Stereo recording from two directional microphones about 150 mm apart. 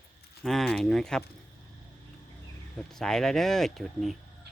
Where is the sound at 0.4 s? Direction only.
5° left (ahead or behind).